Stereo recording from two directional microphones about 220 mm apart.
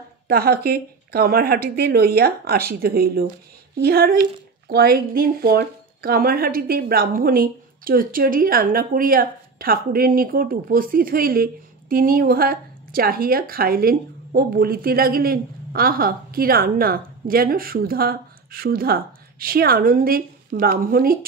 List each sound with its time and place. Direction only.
0.3 s a woman's voice: 45° right (ahead or behind)